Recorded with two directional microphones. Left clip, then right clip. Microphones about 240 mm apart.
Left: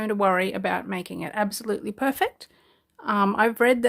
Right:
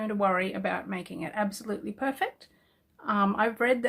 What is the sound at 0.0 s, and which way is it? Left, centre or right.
Speech, left.